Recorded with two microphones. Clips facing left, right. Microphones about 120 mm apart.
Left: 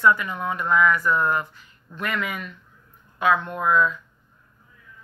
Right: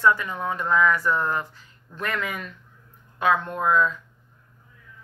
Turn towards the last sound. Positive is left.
turn(degrees=-35)  # may be behind; listen again after turning